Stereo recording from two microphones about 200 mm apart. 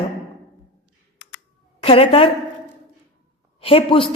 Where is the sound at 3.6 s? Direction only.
25° left (ahead or behind).